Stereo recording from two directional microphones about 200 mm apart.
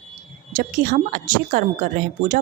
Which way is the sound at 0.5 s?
40° right (ahead or behind).